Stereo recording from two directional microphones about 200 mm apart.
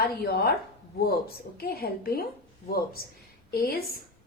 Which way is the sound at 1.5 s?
50° left (ahead or behind).